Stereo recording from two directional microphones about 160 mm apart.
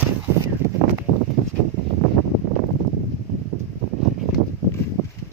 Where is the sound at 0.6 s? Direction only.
15° right (ahead or behind).